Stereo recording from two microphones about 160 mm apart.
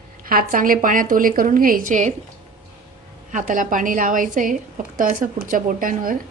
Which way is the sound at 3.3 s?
50° right (ahead or behind).